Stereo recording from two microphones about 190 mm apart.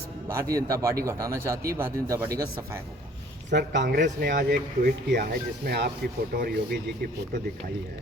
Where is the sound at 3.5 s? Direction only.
65° right (ahead or behind).